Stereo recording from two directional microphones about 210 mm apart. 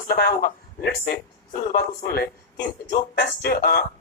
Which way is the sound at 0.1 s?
45° left (ahead or behind).